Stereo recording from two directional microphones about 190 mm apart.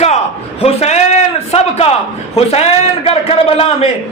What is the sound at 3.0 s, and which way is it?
Speech, 30° left (ahead or behind).